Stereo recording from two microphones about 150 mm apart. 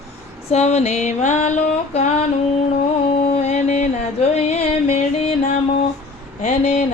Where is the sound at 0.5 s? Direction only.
45° left (ahead or behind).